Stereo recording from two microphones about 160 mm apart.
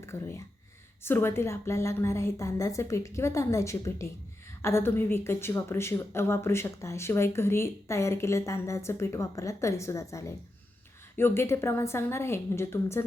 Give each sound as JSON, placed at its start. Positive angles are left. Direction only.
{"t": 0.0, "sound": "a woman's voice", "side_deg": 15}